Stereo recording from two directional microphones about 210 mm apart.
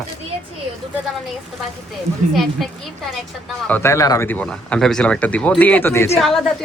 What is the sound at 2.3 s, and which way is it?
Speech, centre (ahead or behind).